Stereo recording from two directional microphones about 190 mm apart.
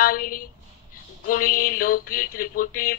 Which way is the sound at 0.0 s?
50° left (ahead or behind).